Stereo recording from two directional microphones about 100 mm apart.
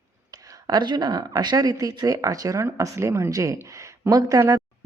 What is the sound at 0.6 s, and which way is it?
Speech, 45° right (ahead or behind).